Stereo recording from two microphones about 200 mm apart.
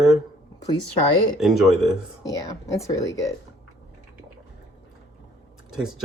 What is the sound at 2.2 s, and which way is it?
Speech, 15° left (ahead or behind).